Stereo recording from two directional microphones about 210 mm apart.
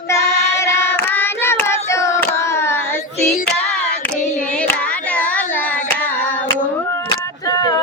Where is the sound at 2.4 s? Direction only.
10° left (ahead or behind).